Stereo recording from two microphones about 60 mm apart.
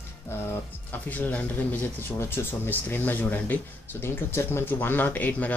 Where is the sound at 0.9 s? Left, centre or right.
Left.